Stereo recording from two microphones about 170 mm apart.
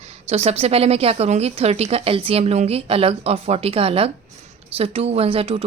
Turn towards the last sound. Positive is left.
turn(degrees=-35)  # may be behind; listen again after turning